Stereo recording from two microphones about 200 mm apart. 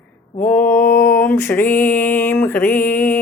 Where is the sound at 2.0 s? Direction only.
10° left (ahead or behind).